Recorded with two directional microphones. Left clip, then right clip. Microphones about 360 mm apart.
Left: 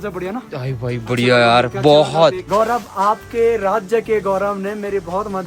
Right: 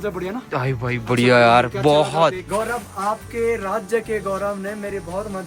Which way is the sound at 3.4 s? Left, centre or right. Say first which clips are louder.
Left 6 dB; centre.